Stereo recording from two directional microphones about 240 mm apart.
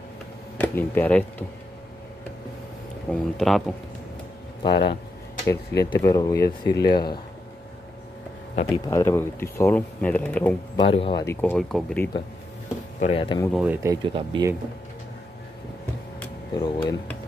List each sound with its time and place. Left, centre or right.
0.6 s speech: centre
3.1 s speech: centre
4.6 s speech: centre
8.8 s speech: centre
10.8 s speech: left
11.5 s speech: centre
13.0 s speech: left
13.5 s speech: centre
14.0 s speech: centre
16.2 s a sound: centre